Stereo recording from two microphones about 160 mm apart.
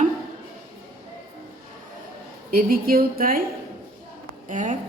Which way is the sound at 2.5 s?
65° right (ahead or behind).